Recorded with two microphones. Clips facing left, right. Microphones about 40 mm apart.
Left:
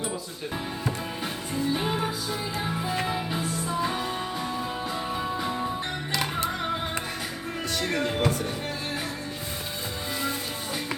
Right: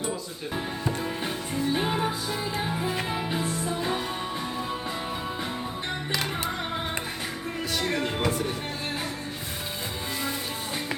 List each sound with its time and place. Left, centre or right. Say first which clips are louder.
1.2 s music: right 1 dB; centre
3.1 s music: even; centre
7.8 s music: left 2 dB; centre